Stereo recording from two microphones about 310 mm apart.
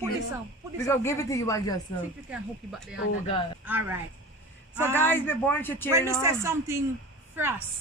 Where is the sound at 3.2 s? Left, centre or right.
Centre.